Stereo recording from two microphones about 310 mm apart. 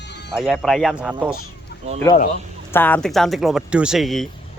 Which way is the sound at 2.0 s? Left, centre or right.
Centre.